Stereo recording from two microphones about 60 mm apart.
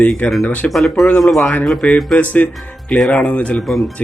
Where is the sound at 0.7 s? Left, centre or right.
Centre.